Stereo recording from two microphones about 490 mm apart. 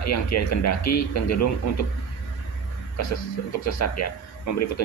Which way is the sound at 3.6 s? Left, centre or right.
Left.